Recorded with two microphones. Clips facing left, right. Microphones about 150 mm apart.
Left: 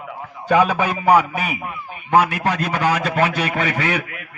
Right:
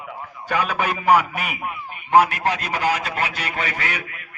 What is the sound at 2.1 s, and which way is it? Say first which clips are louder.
A man's voice: even; 65° left (ahead or behind).